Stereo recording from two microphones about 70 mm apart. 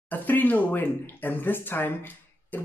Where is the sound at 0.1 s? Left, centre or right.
Left.